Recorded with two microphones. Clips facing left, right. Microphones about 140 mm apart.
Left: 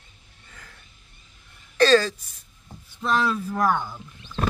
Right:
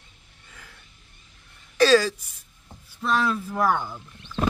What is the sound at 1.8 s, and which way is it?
A woman's voice, 10° right (ahead or behind).